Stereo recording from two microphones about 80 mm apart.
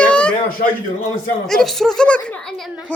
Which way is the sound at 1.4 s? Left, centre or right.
Centre.